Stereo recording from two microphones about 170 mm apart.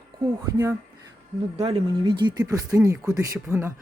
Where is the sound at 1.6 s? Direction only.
35° right (ahead or behind).